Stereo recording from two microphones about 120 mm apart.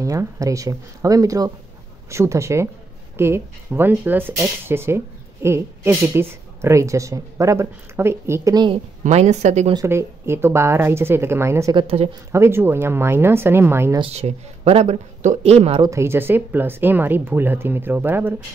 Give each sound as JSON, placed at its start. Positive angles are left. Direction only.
{"t": 0.0, "sound": "speech", "side_deg": -25}
{"t": 9.0, "sound": "speech", "side_deg": -70}
{"t": 9.8, "sound": "speech", "side_deg": -20}
{"t": 11.7, "sound": "speech", "side_deg": -55}
{"t": 12.3, "sound": "speech", "side_deg": -20}
{"t": 14.0, "sound": "speech", "side_deg": -60}
{"t": 15.8, "sound": "speech", "side_deg": -25}